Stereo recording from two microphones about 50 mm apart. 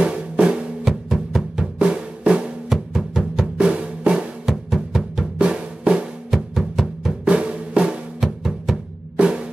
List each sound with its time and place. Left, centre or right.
0.0 s drum: centre
0.8 s music: centre
1.8 s drum: right
2.7 s music: centre
3.5 s drum: centre
5.4 s drum: centre
6.3 s music: centre
7.2 s drum: right
8.2 s music: centre
9.1 s drum: right